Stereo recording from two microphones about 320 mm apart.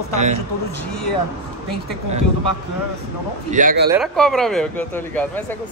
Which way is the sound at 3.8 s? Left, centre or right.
Centre.